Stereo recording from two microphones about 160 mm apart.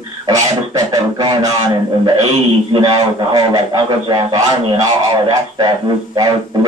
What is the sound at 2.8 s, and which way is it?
Music, 25° right (ahead or behind).